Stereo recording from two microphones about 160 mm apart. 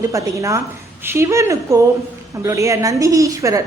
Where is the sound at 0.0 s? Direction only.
20° right (ahead or behind).